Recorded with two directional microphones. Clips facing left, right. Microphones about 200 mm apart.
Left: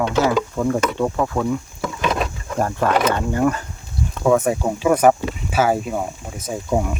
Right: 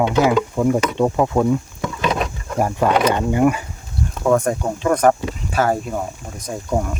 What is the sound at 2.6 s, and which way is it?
Speech, 10° right (ahead or behind).